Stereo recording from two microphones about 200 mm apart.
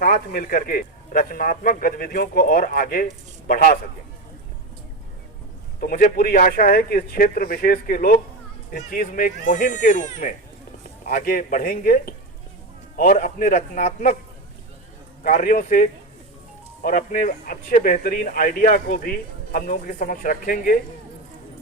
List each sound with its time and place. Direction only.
0.0 s speech: 45° left (ahead or behind)
5.8 s speech: 45° left (ahead or behind)
15.2 s speech: 45° left (ahead or behind)